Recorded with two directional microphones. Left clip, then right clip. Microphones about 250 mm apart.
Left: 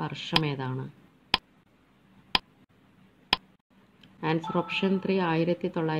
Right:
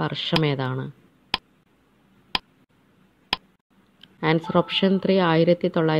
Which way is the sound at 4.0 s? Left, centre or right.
Right.